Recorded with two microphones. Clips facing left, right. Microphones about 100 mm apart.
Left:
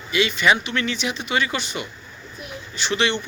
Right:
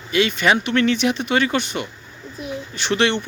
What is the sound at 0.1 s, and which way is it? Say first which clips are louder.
Speech: right 2 dB; 50° right (ahead or behind).